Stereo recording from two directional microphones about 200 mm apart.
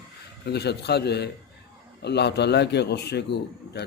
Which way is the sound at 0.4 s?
55° left (ahead or behind).